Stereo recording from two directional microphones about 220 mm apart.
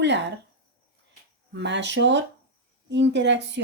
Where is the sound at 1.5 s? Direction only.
50° right (ahead or behind).